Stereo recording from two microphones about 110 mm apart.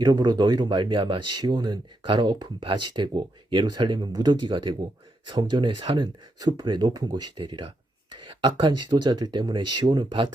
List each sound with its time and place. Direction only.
0.0 s speech: 40° right (ahead or behind)
6.4 s speech: 40° right (ahead or behind)